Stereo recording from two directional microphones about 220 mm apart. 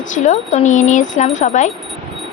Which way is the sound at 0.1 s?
35° left (ahead or behind).